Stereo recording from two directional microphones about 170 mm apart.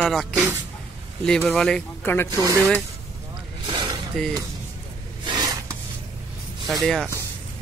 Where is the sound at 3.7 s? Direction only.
25° right (ahead or behind).